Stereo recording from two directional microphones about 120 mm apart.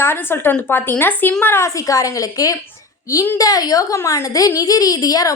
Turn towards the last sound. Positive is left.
turn(degrees=30)  # may be behind; listen again after turning